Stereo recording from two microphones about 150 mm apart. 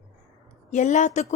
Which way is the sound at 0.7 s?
50° left (ahead or behind).